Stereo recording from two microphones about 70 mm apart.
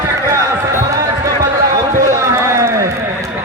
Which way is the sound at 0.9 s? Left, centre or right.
Right.